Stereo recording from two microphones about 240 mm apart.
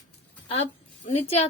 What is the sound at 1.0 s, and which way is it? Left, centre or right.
Speech, left.